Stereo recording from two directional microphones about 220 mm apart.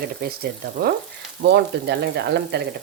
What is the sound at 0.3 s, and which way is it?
Speech, 45° right (ahead or behind).